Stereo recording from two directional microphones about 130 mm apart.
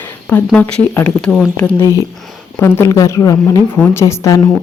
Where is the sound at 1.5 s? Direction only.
20° left (ahead or behind).